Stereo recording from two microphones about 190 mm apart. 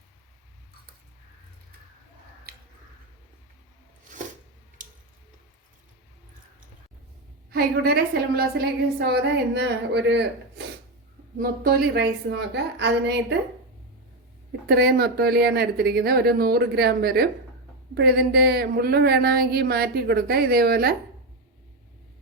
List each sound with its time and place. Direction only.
7.5 s speech: 55° right (ahead or behind)
11.3 s speech: 50° right (ahead or behind)
14.7 s speech: 55° right (ahead or behind)